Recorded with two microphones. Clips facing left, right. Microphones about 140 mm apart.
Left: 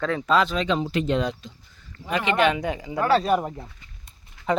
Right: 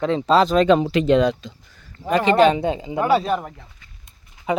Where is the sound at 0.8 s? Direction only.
90° right.